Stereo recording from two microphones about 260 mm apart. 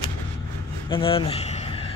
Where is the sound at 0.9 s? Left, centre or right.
Centre.